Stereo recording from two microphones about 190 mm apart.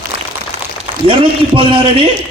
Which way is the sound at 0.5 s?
35° right (ahead or behind).